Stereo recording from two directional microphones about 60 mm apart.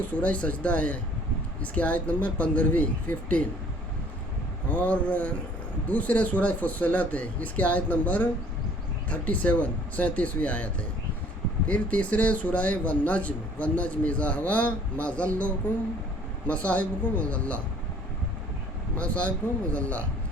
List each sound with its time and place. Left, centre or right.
0.1 s speech: left
4.7 s speech: left
18.9 s speech: left